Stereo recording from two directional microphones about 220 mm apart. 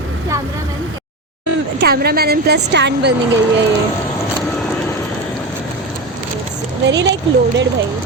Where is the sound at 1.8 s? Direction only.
45° right (ahead or behind).